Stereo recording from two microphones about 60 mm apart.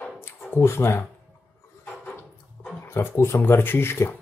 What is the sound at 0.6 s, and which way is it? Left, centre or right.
Speech, left.